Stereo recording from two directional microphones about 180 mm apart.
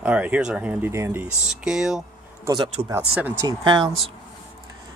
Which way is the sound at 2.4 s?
25° right (ahead or behind).